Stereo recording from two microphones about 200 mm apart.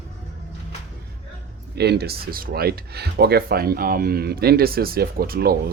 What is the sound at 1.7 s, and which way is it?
Speech, 55° right (ahead or behind).